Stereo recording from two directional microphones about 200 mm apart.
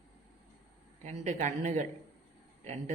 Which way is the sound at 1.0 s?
35° right (ahead or behind).